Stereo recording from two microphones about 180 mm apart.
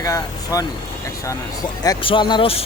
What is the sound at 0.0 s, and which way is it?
Speech, 20° left (ahead or behind).